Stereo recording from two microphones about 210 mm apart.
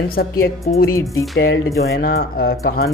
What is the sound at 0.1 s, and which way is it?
Speech, 45° left (ahead or behind).